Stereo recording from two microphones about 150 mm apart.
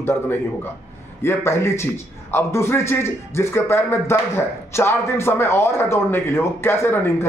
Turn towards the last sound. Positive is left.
turn(degrees=15)  # may be behind; listen again after turning